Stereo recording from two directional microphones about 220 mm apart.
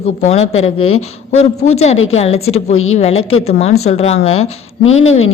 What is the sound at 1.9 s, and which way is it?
A woman's voice, 65° left (ahead or behind).